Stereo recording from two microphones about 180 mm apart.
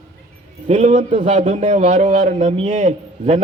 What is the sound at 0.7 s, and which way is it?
A man's voice, 40° right (ahead or behind).